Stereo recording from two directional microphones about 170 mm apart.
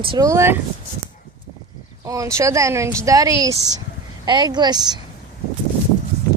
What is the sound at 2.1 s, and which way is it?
Speech, 20° right (ahead or behind).